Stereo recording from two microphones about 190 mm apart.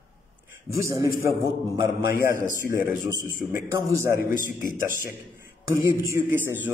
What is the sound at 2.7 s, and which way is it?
A man's voice, 15° right (ahead or behind).